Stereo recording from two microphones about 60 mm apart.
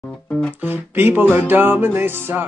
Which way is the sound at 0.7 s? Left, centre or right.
Right.